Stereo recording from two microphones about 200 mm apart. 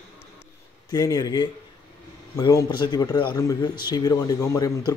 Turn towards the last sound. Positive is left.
turn(degrees=15)  # may be behind; listen again after turning